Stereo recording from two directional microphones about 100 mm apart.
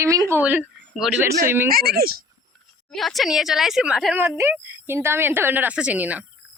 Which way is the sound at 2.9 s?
Centre (ahead or behind).